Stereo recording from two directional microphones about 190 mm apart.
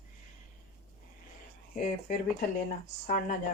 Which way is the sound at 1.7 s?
45° left (ahead or behind).